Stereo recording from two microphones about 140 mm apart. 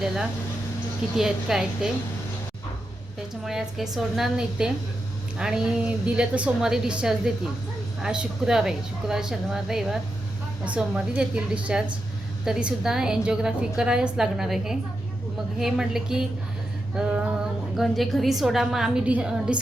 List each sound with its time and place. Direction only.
1.1 s a woman's voice: 5° right (ahead or behind)
3.4 s a woman's voice: centre (ahead or behind)